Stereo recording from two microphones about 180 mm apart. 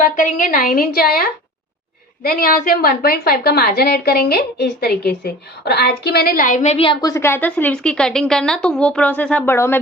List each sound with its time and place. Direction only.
0.0 s a woman's voice: 45° left (ahead or behind); by 9.8 s 10° left (ahead or behind)